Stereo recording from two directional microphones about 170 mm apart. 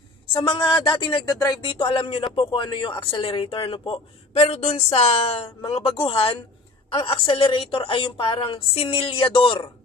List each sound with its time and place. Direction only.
0.3 s speech: 30° left (ahead or behind)